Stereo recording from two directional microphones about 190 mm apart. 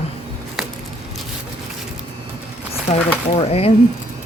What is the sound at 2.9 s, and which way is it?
Speech, 30° left (ahead or behind).